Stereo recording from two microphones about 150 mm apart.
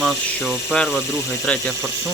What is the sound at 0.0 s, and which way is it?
Speech, centre (ahead or behind).